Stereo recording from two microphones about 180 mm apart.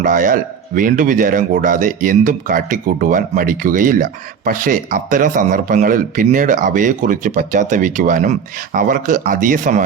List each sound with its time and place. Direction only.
0.0 s speech: 45° right (ahead or behind)